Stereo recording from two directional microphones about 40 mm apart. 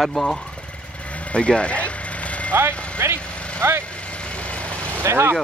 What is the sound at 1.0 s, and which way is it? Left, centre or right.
Vehicle, left.